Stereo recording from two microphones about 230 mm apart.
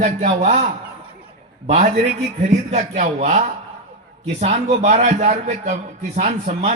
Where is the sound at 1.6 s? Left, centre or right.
Right.